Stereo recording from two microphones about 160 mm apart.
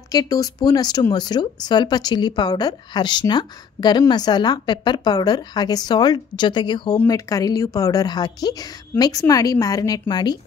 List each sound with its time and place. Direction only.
0.1 s a woman's voice: 20° left (ahead or behind)